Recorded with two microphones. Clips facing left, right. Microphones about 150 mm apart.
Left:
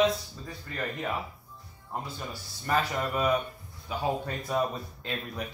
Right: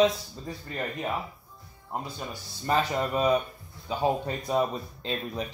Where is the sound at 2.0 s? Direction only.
20° right (ahead or behind).